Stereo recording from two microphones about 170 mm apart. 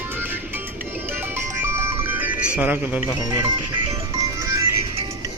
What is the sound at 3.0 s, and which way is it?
Speech, 15° right (ahead or behind).